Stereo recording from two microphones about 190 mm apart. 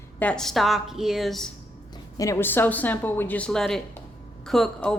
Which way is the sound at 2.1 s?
15° left (ahead or behind).